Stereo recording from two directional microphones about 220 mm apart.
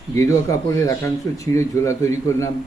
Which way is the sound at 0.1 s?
15° left (ahead or behind).